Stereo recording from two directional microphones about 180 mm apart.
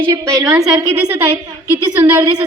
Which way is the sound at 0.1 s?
20° right (ahead or behind).